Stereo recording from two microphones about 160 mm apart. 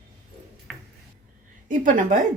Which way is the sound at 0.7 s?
5° left (ahead or behind).